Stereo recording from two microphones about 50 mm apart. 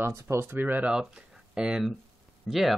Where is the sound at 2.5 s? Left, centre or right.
Centre.